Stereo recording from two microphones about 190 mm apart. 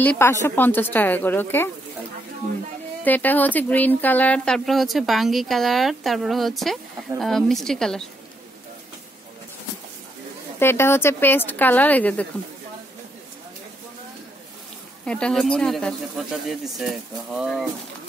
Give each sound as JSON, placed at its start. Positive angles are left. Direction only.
{"t": 0.0, "sound": "speech", "side_deg": 10}
{"t": 3.0, "sound": "speech", "side_deg": 10}
{"t": 10.6, "sound": "speech", "side_deg": 10}
{"t": 15.0, "sound": "speech", "side_deg": 5}